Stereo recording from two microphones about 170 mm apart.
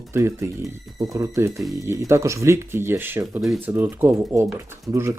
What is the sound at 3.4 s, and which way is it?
Speech, centre (ahead or behind).